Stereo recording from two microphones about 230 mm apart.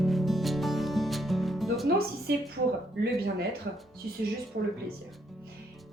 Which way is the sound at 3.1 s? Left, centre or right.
Right.